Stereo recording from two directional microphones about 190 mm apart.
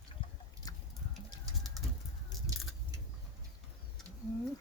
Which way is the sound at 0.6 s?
20° left (ahead or behind).